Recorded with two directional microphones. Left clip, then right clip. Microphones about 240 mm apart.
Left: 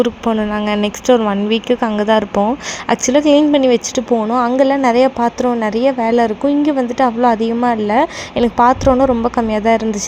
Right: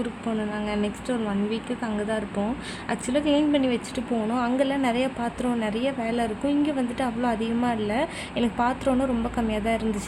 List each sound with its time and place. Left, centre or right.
0.5 s a woman's voice: left